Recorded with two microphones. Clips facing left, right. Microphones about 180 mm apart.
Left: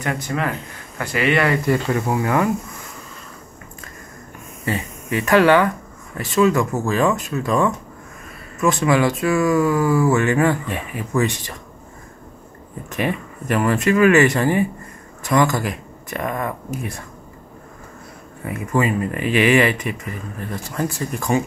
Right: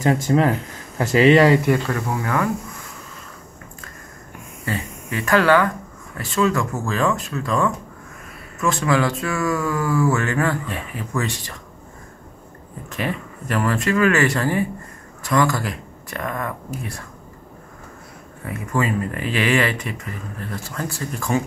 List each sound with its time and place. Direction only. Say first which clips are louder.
0.0 s speech: right 6 dB; 30° right (ahead or behind)
1.9 s speech: left 4 dB; 20° left (ahead or behind)
4.6 s speech: left 3 dB; 15° left (ahead or behind)
8.8 s speech: left 3 dB; 15° left (ahead or behind)
12.9 s speech: left 3 dB; 15° left (ahead or behind)
18.4 s speech: left 3 dB; 15° left (ahead or behind)